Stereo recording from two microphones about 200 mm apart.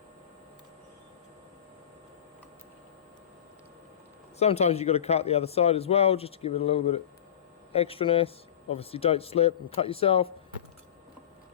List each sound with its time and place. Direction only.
4.4 s a man's voice: 30° left (ahead or behind)